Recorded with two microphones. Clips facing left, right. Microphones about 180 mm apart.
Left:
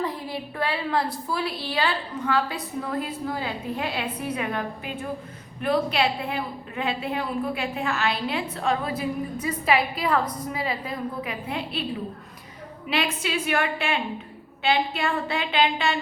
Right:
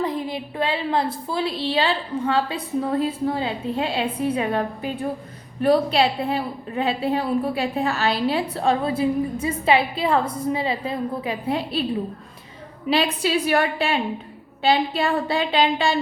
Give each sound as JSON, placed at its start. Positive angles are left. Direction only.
{"t": 0.0, "sound": "a woman's voice", "side_deg": -20}
{"t": 12.9, "sound": "a woman's voice", "side_deg": -35}